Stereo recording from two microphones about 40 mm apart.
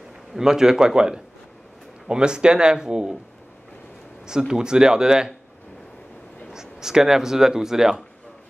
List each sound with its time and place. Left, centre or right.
0.3 s a man's voice: centre
4.3 s speech: centre
6.5 s speech: centre